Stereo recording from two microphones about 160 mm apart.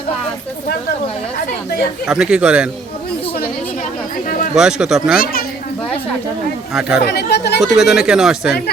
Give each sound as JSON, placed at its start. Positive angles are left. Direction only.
{"t": 2.0, "sound": "speech", "side_deg": -5}
{"t": 4.5, "sound": "speech", "side_deg": -5}
{"t": 5.2, "sound": "a child's voice", "side_deg": 70}
{"t": 6.7, "sound": "speech", "side_deg": -5}
{"t": 7.0, "sound": "speech", "side_deg": 90}
{"t": 7.6, "sound": "speech", "side_deg": -5}
{"t": 8.4, "sound": "speech", "side_deg": 80}